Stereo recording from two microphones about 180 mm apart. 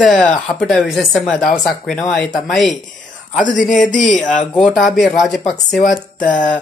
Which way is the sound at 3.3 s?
45° left (ahead or behind).